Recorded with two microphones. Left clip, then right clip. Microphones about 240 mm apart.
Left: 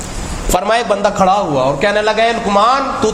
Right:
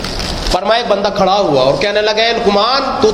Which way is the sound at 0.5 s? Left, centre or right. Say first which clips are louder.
Right 1 dB; left.